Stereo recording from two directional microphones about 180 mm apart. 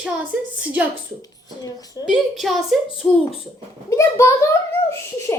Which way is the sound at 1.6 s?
20° left (ahead or behind).